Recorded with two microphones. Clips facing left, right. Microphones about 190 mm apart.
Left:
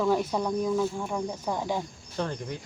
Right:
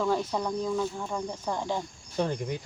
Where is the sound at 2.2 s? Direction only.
15° right (ahead or behind).